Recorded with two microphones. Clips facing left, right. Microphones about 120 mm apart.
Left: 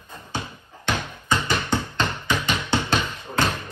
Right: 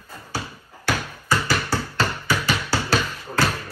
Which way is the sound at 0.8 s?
20° left (ahead or behind).